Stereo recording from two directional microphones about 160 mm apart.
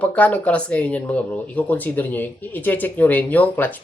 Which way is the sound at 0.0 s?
10° left (ahead or behind).